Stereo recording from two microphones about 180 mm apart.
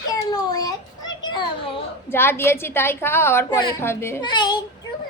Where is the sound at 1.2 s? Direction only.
25° left (ahead or behind).